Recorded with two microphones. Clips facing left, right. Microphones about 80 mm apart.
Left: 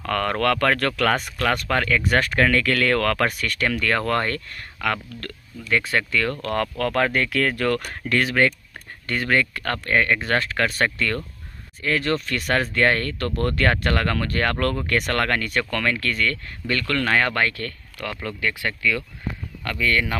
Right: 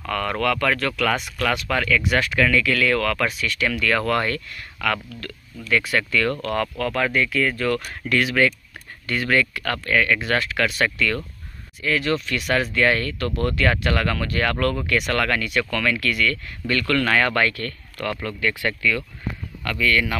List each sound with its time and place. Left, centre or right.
0.0 s speech: left
4.7 s speech: left
6.8 s speech: left
7.8 s speech: left